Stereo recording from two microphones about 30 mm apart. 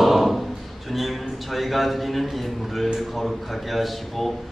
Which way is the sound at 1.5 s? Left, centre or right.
Centre.